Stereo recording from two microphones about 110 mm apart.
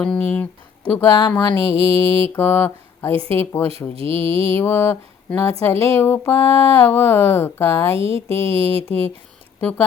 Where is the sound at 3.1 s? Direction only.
60° right (ahead or behind).